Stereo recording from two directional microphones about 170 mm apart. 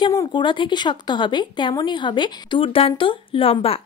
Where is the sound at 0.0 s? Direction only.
25° left (ahead or behind).